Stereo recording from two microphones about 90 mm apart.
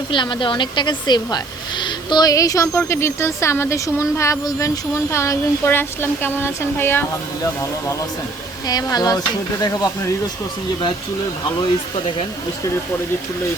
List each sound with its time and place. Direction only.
0.1 s speech: 65° left (ahead or behind)
2.3 s a woman's voice: 40° left (ahead or behind)
8.6 s speech: 45° left (ahead or behind)